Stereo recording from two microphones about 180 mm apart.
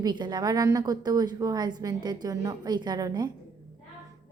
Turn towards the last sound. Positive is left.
turn(degrees=-20)  # may be behind; listen again after turning